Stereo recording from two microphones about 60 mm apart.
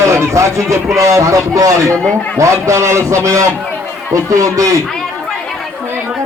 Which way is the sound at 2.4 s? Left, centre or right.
Right.